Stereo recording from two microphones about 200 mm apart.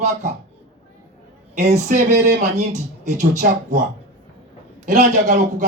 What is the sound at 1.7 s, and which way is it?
Speech, 35° right (ahead or behind).